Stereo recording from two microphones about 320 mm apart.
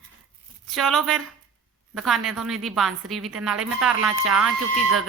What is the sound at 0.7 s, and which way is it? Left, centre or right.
A woman's voice, centre.